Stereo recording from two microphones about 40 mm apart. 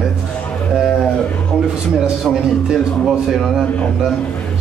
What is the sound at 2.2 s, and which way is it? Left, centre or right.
Speech, centre.